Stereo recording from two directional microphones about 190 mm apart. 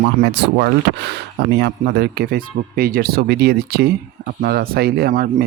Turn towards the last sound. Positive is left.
turn(degrees=-50)  # may be behind; listen again after turning